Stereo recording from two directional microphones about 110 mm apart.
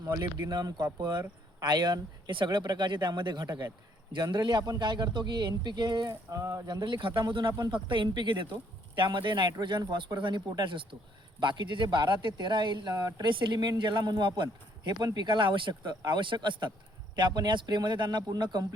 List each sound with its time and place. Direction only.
0.0 s speech: 30° right (ahead or behind)